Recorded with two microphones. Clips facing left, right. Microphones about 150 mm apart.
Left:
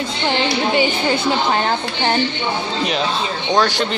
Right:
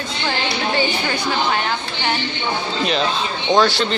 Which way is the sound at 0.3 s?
25° left (ahead or behind).